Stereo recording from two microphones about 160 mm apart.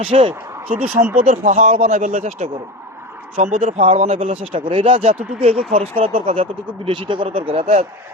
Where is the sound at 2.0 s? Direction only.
50° right (ahead or behind).